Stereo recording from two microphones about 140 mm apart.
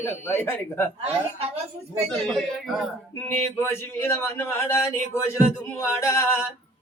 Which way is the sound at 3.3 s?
15° left (ahead or behind).